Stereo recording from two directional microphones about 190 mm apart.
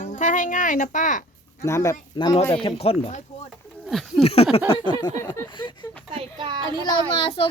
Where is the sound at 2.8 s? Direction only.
30° left (ahead or behind).